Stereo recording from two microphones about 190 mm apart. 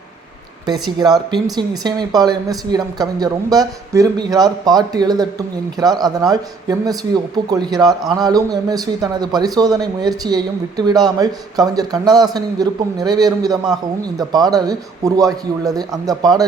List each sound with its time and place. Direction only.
0.6 s a woman's voice: 20° right (ahead or behind)